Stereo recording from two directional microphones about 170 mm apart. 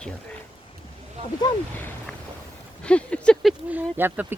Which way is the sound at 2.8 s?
5° left (ahead or behind).